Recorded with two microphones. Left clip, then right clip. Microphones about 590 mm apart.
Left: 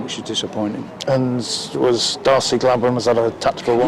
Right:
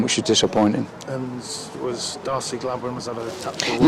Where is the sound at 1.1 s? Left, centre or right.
Left.